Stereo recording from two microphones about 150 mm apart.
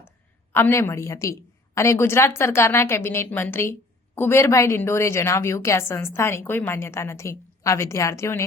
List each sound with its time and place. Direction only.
0.5 s a woman's voice: 15° left (ahead or behind)